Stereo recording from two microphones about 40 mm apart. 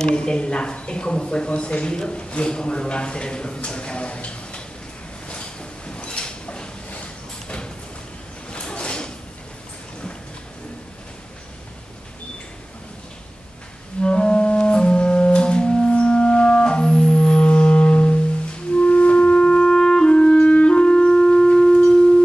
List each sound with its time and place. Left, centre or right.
0.0 s speech: left
5.3 s a sound: left
14.0 s music: left